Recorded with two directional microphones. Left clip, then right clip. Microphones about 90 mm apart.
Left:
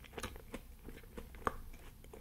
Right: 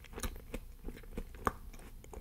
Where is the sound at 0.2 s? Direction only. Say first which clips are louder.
Right 1 dB; 30° right (ahead or behind).